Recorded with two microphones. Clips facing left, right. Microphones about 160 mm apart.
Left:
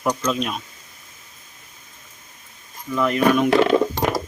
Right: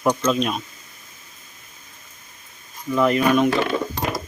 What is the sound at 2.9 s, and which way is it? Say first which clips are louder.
Speech: right 1 dB; 5° right (ahead or behind).